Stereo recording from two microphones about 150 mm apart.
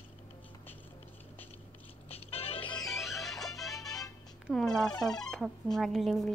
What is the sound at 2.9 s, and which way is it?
Music, centre (ahead or behind).